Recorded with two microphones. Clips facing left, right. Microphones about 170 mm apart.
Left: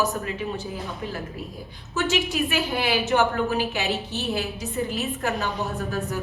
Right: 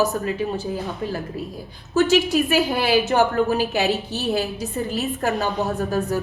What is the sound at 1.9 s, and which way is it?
A woman's voice, 35° right (ahead or behind).